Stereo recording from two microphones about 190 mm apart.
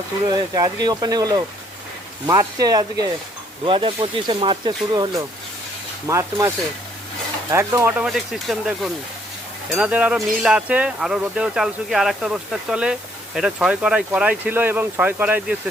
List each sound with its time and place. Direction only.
0.3 s speech: 20° right (ahead or behind)
7.5 s speech: 15° right (ahead or behind)